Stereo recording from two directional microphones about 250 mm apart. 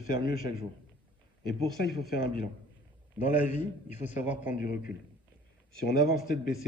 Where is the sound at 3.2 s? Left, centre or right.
Left.